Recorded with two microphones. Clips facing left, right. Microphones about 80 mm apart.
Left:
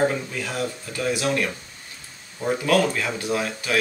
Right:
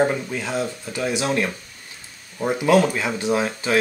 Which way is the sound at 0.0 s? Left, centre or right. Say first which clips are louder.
Right 2 dB; right.